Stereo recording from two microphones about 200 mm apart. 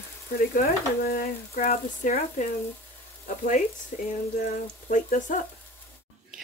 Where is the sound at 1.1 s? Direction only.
45° left (ahead or behind).